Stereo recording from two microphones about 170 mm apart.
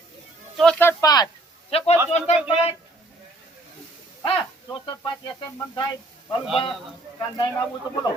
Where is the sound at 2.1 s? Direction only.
40° left (ahead or behind).